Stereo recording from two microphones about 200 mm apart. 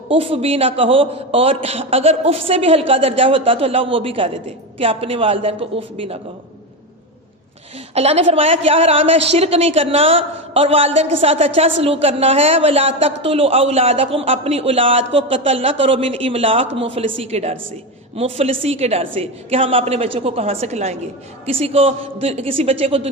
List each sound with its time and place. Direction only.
0.1 s a man's voice: 30° right (ahead or behind)
7.9 s a woman's voice: 30° right (ahead or behind)